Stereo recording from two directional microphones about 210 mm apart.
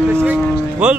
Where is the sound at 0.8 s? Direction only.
5° right (ahead or behind).